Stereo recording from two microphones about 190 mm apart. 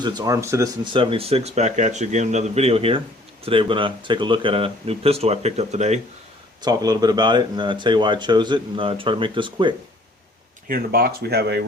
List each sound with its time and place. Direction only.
0.0 s speech: 20° right (ahead or behind)
0.9 s speech: 30° right (ahead or behind)
6.6 s speech: 20° right (ahead or behind)
10.7 s speech: 50° right (ahead or behind)